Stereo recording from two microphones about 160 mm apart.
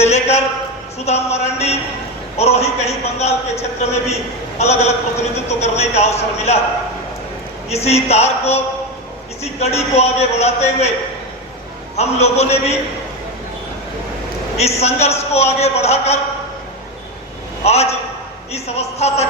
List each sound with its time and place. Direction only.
0.0 s a man's voice: 40° left (ahead or behind)
7.7 s a man's voice: 40° left (ahead or behind)
11.9 s a man's voice: 40° left (ahead or behind)
14.6 s a man's voice: 45° left (ahead or behind)
17.6 s a man's voice: 40° left (ahead or behind)